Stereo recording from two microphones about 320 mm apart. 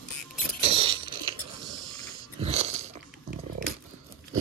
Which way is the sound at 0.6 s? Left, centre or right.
Centre.